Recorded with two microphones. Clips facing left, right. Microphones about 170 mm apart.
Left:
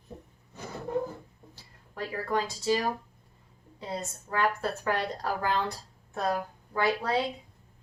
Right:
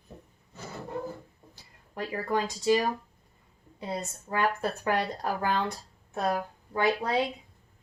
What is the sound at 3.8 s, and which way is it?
A woman's voice, 15° right (ahead or behind).